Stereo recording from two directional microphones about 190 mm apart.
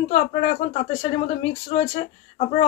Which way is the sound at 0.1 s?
40° left (ahead or behind).